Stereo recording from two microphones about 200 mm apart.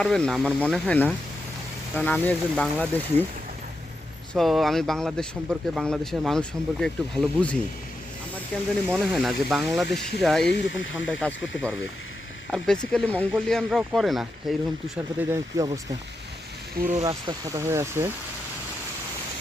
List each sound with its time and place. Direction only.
0.0 s speech: 5° left (ahead or behind)
4.4 s speech: centre (ahead or behind)
8.5 s speech: 10° left (ahead or behind); by 16.0 s 15° right (ahead or behind)
17.0 s speech: 15° right (ahead or behind)